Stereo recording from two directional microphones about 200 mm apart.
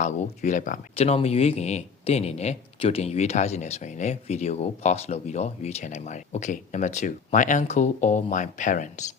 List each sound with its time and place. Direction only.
0.0 s speech: 40° left (ahead or behind)